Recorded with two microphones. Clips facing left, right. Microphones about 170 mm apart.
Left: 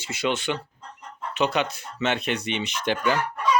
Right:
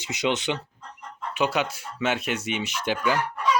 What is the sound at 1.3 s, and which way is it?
Speech, 10° right (ahead or behind).